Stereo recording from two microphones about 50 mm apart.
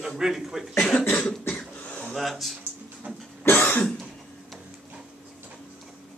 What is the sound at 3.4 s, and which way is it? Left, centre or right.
Cough, left.